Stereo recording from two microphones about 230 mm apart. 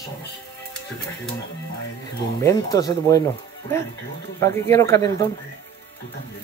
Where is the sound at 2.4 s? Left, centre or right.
Centre.